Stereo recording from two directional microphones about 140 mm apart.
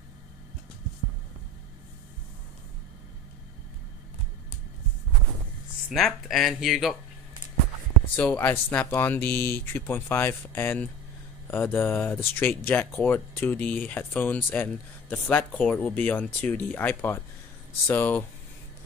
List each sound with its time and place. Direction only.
5.9 s speech: centre (ahead or behind)
8.2 s speech: 15° left (ahead or behind)